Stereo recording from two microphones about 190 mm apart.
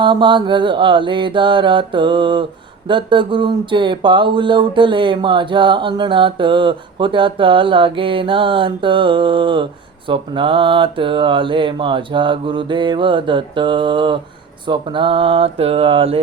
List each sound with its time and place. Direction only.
0.0 s mantra: 25° right (ahead or behind)